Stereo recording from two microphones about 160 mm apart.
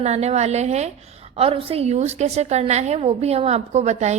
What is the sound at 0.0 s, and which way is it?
A woman's voice, 45° right (ahead or behind).